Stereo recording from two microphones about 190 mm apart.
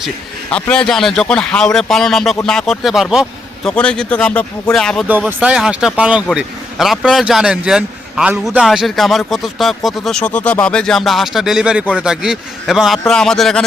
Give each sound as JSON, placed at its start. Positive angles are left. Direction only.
{"t": 0.5, "sound": "speech", "side_deg": 5}
{"t": 5.0, "sound": "speech", "side_deg": -10}